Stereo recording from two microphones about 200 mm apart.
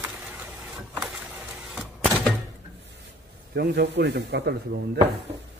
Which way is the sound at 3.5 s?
55° right (ahead or behind).